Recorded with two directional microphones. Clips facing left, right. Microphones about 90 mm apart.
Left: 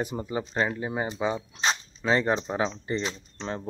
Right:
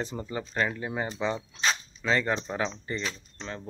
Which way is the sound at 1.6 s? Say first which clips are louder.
Left 2 dB; 25° left (ahead or behind).